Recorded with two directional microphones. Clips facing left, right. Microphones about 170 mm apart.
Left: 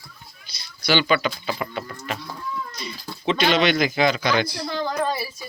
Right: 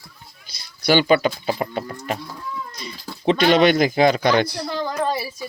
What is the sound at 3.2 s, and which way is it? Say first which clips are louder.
Speech: right 5 dB; 50° right (ahead or behind).